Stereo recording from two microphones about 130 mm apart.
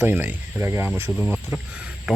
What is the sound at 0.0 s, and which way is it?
Speech, 15° right (ahead or behind).